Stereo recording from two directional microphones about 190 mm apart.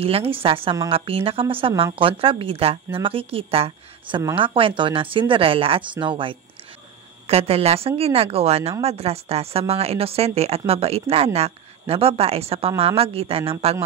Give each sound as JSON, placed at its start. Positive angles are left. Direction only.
{"t": 0.0, "sound": "a woman's voice", "side_deg": -30}